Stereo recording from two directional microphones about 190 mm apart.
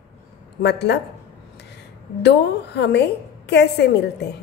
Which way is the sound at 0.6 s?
65° left (ahead or behind).